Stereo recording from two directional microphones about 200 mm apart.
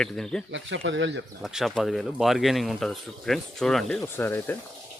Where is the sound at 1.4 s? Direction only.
Centre (ahead or behind).